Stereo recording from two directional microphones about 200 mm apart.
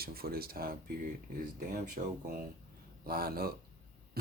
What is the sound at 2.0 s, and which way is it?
Speech, 35° right (ahead or behind).